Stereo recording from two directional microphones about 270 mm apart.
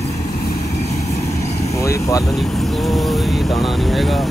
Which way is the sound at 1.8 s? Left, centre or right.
Centre.